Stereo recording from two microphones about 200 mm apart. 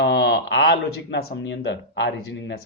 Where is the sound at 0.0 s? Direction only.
60° left (ahead or behind).